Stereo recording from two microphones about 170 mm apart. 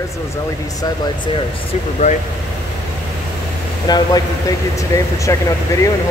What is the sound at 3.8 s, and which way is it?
Speech, 25° left (ahead or behind).